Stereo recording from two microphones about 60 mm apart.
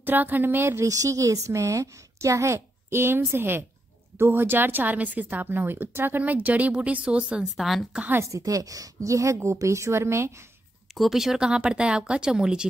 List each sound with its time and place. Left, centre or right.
0.0 s speech: right
0.8 s a woman's voice: right; by 7.4 s centre
7.5 s a woman's voice: centre
8.2 s a woman's voice: right
11.0 s a woman's voice: centre
11.3 s speech: centre